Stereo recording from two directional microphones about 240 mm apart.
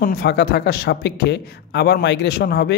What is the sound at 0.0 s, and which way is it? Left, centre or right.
Speech, left.